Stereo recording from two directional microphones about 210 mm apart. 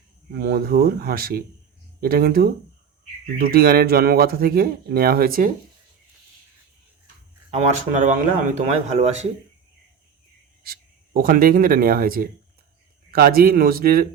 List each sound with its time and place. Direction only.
0.3 s speech: 45° right (ahead or behind)
7.5 s speech: 35° right (ahead or behind)
10.6 s speech: 45° right (ahead or behind)